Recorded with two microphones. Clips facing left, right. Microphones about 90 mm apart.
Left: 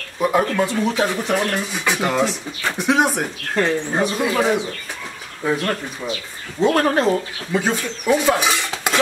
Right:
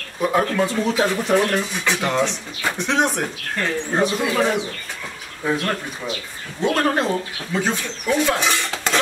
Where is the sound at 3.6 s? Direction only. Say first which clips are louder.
Left 2 dB; 20° left (ahead or behind).